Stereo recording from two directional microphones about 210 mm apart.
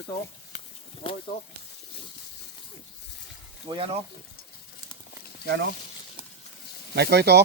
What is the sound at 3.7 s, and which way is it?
Speech, 25° right (ahead or behind).